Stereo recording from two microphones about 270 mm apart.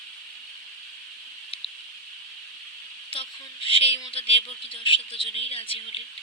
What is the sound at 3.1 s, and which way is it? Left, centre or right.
Speech, centre.